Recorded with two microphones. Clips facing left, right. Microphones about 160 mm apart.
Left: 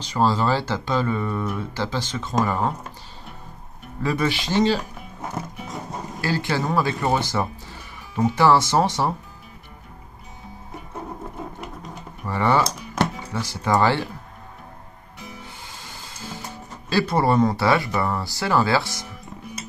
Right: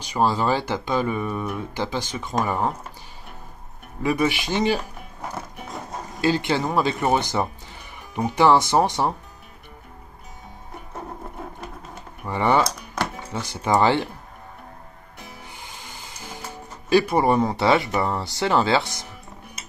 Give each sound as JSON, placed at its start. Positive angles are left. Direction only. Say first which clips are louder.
{"t": 0.0, "sound": "speech", "louder": "left 1 dB", "side_deg": -15}
{"t": 4.0, "sound": "speech", "louder": "right 1 dB", "side_deg": -15}
{"t": 6.2, "sound": "speech", "louder": "right 3 dB", "side_deg": -20}
{"t": 12.3, "sound": "speech", "louder": "even", "side_deg": -20}
{"t": 15.4, "sound": "music", "louder": "even", "side_deg": -15}
{"t": 16.9, "sound": "speech", "louder": "right 2 dB", "side_deg": -15}